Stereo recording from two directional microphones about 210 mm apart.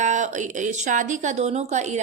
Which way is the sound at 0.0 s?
35° right (ahead or behind).